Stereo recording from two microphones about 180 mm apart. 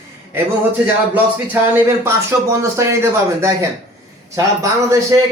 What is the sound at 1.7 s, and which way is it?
Speech, 15° right (ahead or behind).